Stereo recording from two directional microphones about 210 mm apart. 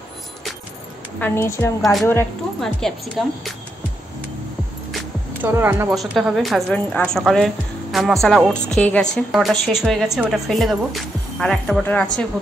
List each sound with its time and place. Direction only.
1.2 s a woman's voice: 10° left (ahead or behind)
1.8 s a woman's voice: centre (ahead or behind)
4.9 s music: 10° right (ahead or behind)
5.9 s a woman's voice: centre (ahead or behind)